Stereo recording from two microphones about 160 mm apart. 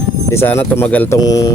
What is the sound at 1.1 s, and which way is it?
Speech, 20° left (ahead or behind).